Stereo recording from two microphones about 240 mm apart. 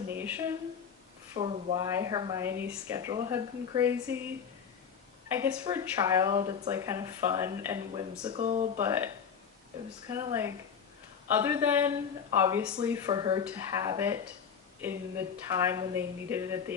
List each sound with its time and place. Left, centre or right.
0.1 s a sound: centre
1.4 s speech: right
1.9 s speech: centre
5.3 s speech: centre
8.4 s speech: right
8.8 s speech: centre
15.5 s speech: centre